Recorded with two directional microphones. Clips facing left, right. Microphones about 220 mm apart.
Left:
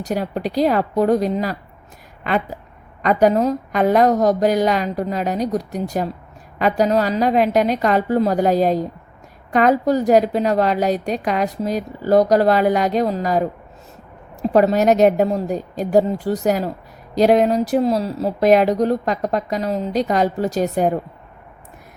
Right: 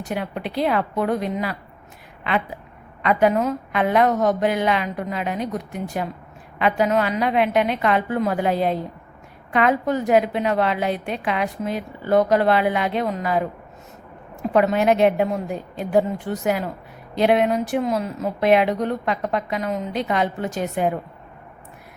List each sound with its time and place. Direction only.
0.0 s a woman's voice: 40° left (ahead or behind)